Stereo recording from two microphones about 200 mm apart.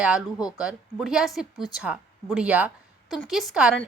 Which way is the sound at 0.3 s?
20° left (ahead or behind).